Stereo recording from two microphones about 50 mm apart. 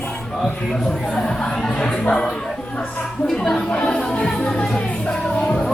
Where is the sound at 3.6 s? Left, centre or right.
Left.